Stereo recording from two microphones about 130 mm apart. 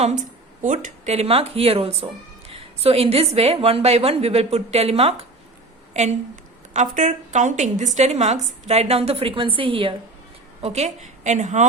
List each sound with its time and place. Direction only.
0.0 s a sound: 70° right (ahead or behind)
1.1 s a woman's voice: 50° right (ahead or behind); by 7.9 s 70° right (ahead or behind)
7.9 s a woman's voice: 60° right (ahead or behind); by 9.9 s 40° right (ahead or behind)
10.6 s a woman's voice: 55° right (ahead or behind)